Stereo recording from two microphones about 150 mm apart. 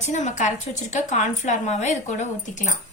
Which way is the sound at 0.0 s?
55° left (ahead or behind).